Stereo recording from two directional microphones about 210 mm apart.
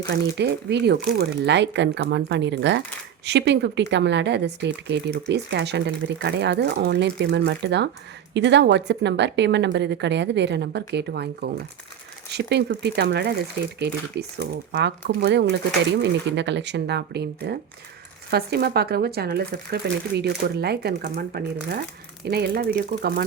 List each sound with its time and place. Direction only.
0.1 s speech: 55° right (ahead or behind)